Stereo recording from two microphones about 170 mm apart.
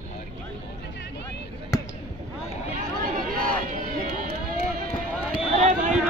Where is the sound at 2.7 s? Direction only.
50° right (ahead or behind).